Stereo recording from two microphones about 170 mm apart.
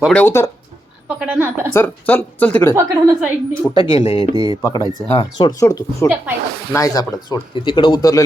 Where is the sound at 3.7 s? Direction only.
30° left (ahead or behind).